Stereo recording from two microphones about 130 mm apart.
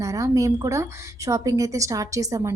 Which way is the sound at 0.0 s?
25° right (ahead or behind).